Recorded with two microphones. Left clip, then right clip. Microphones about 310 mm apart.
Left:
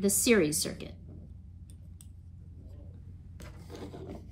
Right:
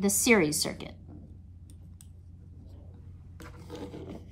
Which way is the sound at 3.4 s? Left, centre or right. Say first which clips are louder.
Right 3 dB; centre.